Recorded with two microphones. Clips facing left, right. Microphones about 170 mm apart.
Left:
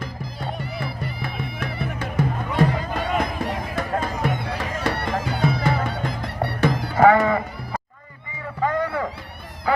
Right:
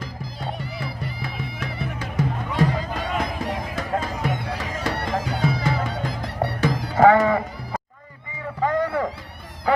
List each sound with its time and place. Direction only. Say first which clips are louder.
0.7 s music: left 2 dB; 60° left (ahead or behind)
6.9 s sheep: right 1 dB; 25° right (ahead or behind)
8.6 s a sound: right 1 dB; 25° right (ahead or behind)